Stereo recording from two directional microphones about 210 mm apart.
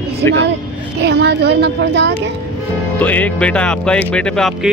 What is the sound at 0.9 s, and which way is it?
A woman's voice, 55° right (ahead or behind).